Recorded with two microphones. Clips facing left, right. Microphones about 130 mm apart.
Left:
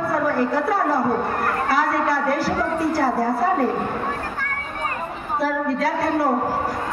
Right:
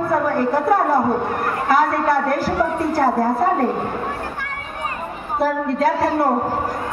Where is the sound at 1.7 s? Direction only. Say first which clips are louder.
Right 5 dB; 50° right (ahead or behind).